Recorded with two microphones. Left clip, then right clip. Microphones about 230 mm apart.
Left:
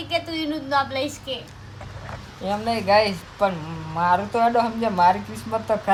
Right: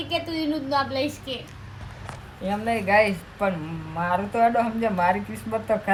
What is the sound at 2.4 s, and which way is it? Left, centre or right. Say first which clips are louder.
A woman's voice: left 2 dB; centre.